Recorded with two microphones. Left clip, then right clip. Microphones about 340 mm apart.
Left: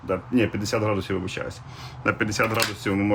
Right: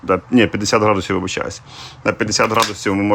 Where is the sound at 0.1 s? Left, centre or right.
Right.